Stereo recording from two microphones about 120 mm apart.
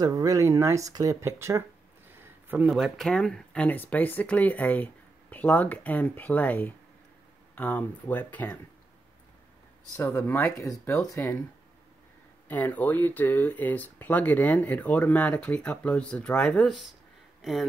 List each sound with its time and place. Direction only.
0.0 s speech: 30° right (ahead or behind)
2.1 s a sound: 20° right (ahead or behind)
2.7 s speech: centre (ahead or behind)
10.1 s speech: 25° left (ahead or behind)
12.4 s speech: 15° left (ahead or behind)